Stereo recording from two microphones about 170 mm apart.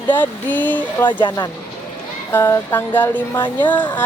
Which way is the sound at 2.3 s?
10° left (ahead or behind).